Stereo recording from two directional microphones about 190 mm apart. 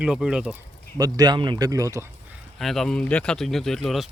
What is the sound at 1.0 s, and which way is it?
Speech, 20° right (ahead or behind).